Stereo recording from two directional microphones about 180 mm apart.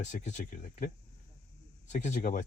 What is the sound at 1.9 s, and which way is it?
Speech, 45° left (ahead or behind).